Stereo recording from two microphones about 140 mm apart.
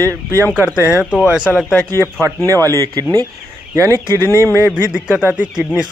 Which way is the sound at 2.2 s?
25° right (ahead or behind).